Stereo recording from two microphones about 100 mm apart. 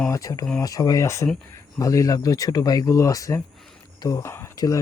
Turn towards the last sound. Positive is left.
turn(degrees=30)  # may be behind; listen again after turning